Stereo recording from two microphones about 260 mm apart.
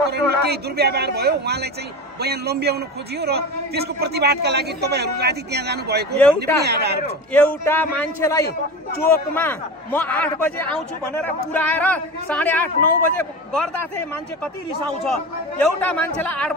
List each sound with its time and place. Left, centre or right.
0.1 s a man's voice: right
6.1 s a man's voice: centre
6.6 s a man's voice: right
7.3 s a man's voice: centre